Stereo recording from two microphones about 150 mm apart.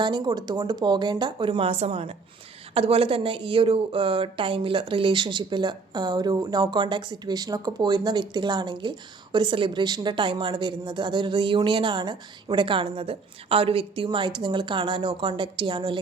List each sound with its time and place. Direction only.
0.0 s speech: 30° right (ahead or behind)